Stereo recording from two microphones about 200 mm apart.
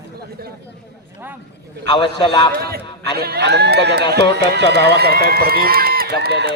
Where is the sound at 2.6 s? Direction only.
50° right (ahead or behind).